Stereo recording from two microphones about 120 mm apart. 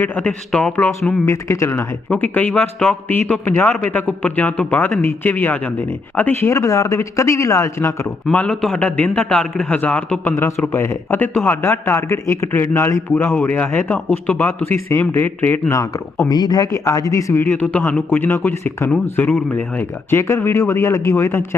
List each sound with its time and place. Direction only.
0.0 s a man's voice: 15° left (ahead or behind)
8.3 s a man's voice: 5° left (ahead or behind)
15.8 s speech: 25° left (ahead or behind)